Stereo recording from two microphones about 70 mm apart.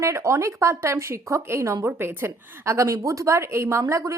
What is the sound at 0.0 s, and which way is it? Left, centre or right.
Speech, right.